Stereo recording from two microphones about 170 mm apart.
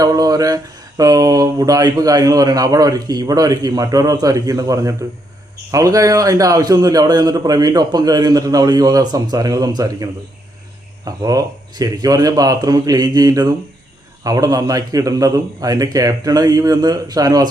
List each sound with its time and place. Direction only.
0.0 s speech: 20° right (ahead or behind)